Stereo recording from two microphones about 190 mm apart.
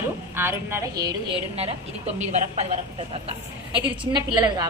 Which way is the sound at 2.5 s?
35° right (ahead or behind).